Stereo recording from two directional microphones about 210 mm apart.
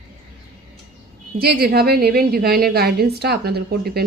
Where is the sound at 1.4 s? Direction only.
50° right (ahead or behind).